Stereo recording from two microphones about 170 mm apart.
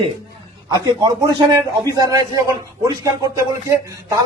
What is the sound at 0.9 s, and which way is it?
A man's voice, 20° right (ahead or behind).